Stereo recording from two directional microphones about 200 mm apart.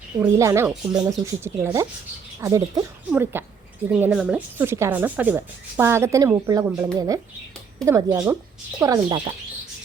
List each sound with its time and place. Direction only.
0.2 s speech: 15° right (ahead or behind)